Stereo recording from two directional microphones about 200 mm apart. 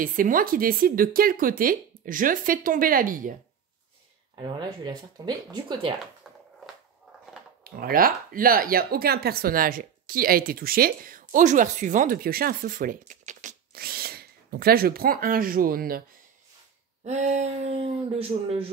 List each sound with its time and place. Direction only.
0.0 s speech: 45° right (ahead or behind)
4.4 s speech: 20° right (ahead or behind)
7.7 s speech: 45° right (ahead or behind)
17.0 s speech: 35° right (ahead or behind)